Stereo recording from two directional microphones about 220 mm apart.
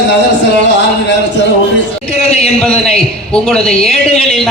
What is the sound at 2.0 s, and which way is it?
Speech, 30° left (ahead or behind).